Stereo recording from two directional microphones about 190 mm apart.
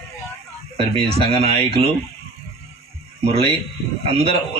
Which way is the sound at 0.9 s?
30° right (ahead or behind).